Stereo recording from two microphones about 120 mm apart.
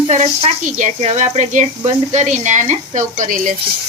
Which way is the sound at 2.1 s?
90° right.